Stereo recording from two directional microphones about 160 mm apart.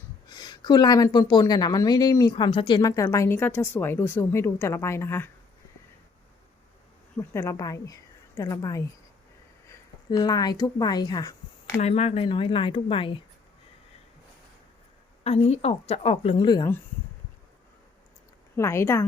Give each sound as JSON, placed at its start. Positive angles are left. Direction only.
{"t": 0.3, "sound": "a woman's voice", "side_deg": 25}
{"t": 7.2, "sound": "a woman's voice", "side_deg": 20}
{"t": 11.8, "sound": "speech", "side_deg": 40}
{"t": 15.2, "sound": "speech", "side_deg": 40}
{"t": 18.5, "sound": "speech", "side_deg": 15}